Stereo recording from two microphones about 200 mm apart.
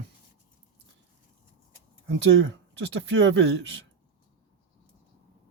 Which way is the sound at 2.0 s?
65° right (ahead or behind).